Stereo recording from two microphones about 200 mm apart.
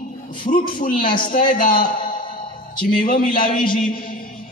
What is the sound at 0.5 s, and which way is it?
Speech, 35° left (ahead or behind).